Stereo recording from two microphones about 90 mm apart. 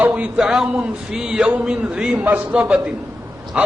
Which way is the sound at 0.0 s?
15° right (ahead or behind).